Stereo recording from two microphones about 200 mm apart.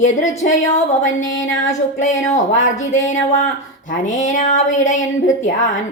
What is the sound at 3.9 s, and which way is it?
Speech, 40° left (ahead or behind).